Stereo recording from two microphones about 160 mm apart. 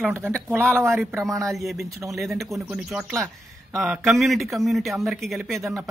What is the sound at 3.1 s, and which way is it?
Speech, 20° right (ahead or behind).